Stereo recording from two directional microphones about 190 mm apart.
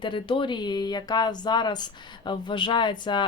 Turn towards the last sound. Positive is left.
turn(degrees=25)  # may be behind; listen again after turning